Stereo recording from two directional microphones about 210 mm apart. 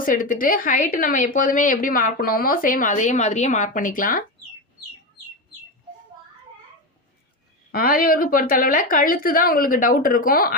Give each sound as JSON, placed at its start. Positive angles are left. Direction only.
{"t": 0.0, "sound": "a woman's voice", "side_deg": 40}
{"t": 7.7, "sound": "speech", "side_deg": 45}